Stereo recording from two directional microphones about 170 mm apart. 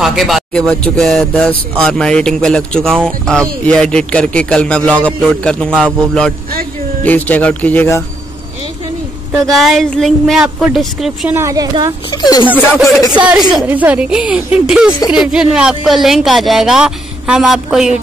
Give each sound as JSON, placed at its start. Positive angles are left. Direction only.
{"t": 0.0, "sound": "speech", "side_deg": 0}
{"t": 7.1, "sound": "speech", "side_deg": 10}
{"t": 9.5, "sound": "speech", "side_deg": 0}
{"t": 11.3, "sound": "speech", "side_deg": -20}
{"t": 12.1, "sound": "speech", "side_deg": 25}
{"t": 13.1, "sound": "a woman's voice", "side_deg": -5}